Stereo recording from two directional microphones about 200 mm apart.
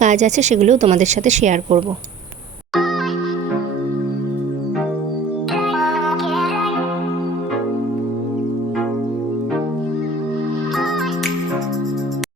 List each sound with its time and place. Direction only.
0.0 s a woman's voice: 35° right (ahead or behind)
5.5 s music: centre (ahead or behind)